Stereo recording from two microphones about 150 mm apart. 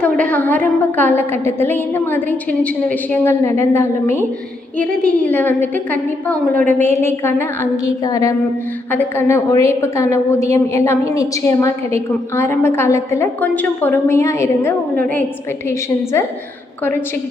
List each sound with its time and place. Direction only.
0.0 s a woman's voice: 10° left (ahead or behind)